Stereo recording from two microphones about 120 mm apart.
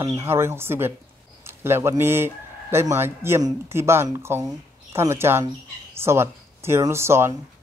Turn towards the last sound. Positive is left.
turn(degrees=-20)  # may be behind; listen again after turning